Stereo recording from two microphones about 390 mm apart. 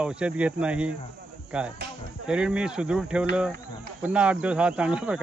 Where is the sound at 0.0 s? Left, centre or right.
Centre.